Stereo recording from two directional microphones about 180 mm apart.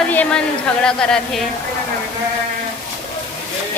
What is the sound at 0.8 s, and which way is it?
Speech, 5° left (ahead or behind).